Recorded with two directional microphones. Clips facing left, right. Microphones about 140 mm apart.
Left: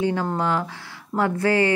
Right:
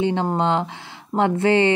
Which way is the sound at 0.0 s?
25° right (ahead or behind).